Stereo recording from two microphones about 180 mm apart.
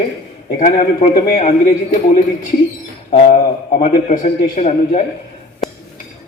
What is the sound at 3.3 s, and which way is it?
A man's voice, 45° left (ahead or behind).